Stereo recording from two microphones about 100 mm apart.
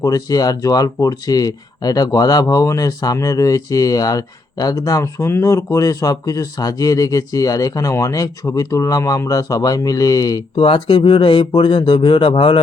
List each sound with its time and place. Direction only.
0.0 s speech: 35° left (ahead or behind)
10.5 s speech: 65° left (ahead or behind)